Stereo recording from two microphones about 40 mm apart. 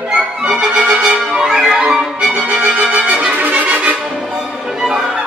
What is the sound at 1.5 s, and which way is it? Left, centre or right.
Music, centre.